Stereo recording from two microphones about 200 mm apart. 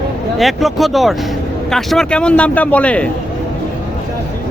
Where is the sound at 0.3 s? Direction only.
Centre (ahead or behind).